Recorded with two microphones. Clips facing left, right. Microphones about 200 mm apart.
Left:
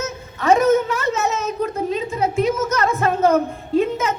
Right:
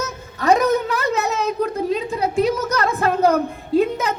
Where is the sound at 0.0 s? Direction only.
35° right (ahead or behind).